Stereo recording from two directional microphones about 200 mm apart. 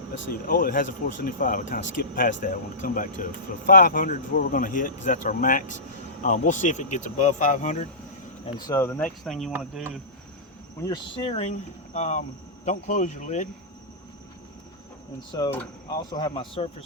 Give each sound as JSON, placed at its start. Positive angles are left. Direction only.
{"t": 0.3, "sound": "speech", "side_deg": 45}
{"t": 8.4, "sound": "speech", "side_deg": 20}
{"t": 10.8, "sound": "speech", "side_deg": 20}
{"t": 11.2, "sound": "speech", "side_deg": 30}
{"t": 15.3, "sound": "speech", "side_deg": 20}